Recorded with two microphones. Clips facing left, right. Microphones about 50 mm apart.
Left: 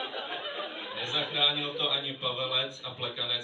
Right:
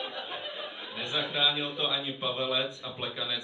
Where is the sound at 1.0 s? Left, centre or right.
Right.